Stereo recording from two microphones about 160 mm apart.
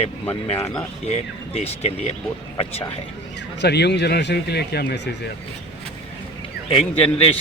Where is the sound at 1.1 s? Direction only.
40° left (ahead or behind).